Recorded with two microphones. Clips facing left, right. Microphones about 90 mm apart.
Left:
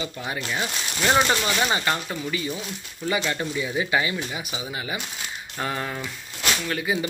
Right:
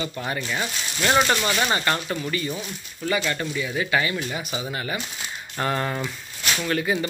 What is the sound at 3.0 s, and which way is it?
Speech, 20° left (ahead or behind).